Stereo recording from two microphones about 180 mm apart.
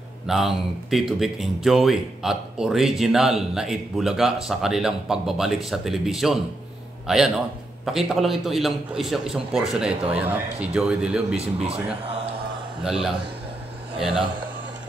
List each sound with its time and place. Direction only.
0.3 s speech: centre (ahead or behind)
11.3 s speech: 35° right (ahead or behind)
12.8 s speech: 5° right (ahead or behind)